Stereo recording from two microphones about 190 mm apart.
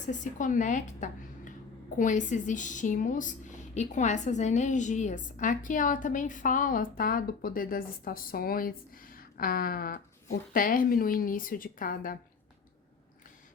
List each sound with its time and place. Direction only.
0.0 s a woman's voice: 40° left (ahead or behind)